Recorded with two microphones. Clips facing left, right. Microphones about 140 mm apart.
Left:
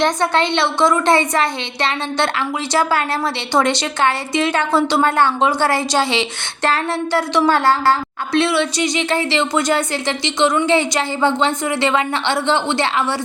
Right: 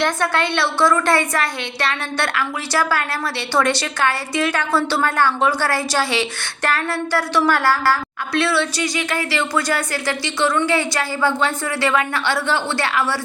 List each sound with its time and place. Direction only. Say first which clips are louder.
0.0 s a woman's voice: left 3 dB; 20° left (ahead or behind)